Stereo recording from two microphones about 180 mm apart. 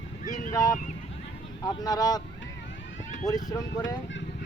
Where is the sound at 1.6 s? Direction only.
20° left (ahead or behind).